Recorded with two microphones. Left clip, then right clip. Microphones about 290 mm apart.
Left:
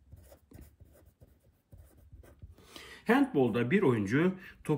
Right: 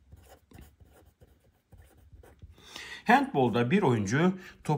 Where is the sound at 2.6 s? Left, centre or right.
Right.